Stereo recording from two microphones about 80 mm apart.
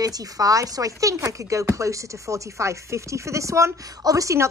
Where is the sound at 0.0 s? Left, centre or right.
Right.